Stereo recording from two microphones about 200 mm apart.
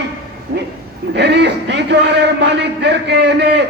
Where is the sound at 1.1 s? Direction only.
55° right (ahead or behind).